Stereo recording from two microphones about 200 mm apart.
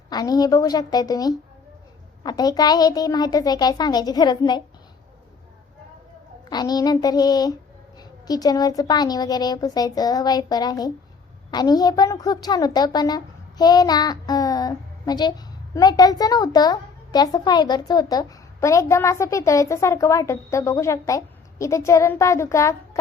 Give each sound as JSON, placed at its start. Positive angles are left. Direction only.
{"t": 0.1, "sound": "a woman's voice", "side_deg": 20}
{"t": 6.5, "sound": "a woman's voice", "side_deg": 20}